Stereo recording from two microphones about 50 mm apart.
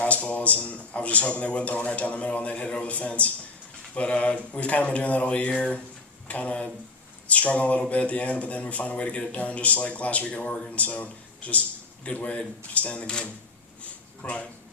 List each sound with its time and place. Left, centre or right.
0.0 s a man's voice: left